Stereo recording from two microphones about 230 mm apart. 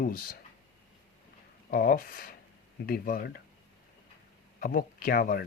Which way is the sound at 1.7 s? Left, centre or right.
Left.